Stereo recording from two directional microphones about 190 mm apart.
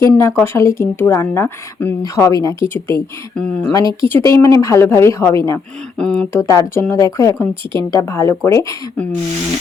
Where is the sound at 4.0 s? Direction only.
15° left (ahead or behind).